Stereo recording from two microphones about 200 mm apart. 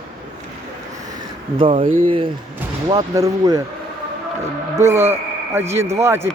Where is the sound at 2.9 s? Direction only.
20° right (ahead or behind).